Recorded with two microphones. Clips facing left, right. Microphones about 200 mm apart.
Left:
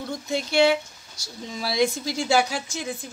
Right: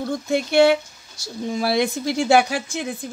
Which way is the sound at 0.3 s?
60° right (ahead or behind).